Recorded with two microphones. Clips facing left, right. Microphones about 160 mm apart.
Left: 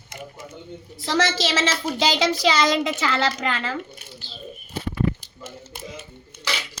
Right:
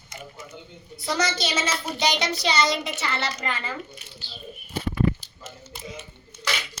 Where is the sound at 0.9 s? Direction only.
90° left.